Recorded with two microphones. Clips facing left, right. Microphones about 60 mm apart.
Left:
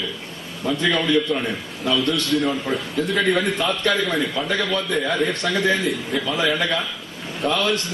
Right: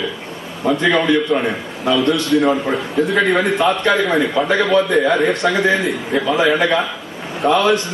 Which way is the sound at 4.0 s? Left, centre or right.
Centre.